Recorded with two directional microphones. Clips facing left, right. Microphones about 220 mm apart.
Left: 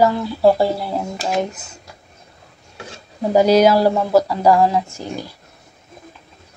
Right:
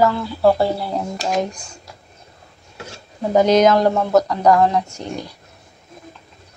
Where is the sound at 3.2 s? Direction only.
10° left (ahead or behind).